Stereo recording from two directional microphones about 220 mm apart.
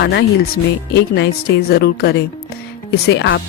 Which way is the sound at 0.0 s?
50° left (ahead or behind).